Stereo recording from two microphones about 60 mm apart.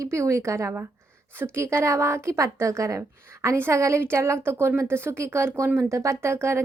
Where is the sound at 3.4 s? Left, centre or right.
Right.